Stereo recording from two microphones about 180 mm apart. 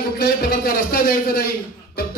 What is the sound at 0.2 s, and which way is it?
A man's voice, 55° left (ahead or behind).